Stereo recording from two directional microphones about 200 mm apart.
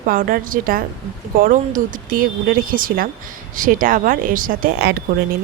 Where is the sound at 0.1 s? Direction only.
45° right (ahead or behind).